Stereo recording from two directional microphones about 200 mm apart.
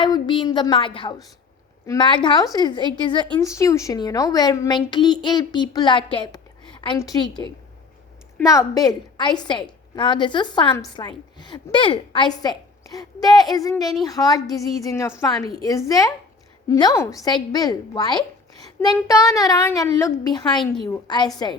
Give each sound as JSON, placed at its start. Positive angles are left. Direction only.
{"t": 0.0, "sound": "a woman's voice", "side_deg": 25}